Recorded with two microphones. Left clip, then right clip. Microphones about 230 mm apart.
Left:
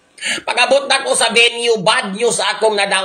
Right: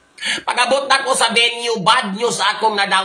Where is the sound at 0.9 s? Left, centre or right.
Right.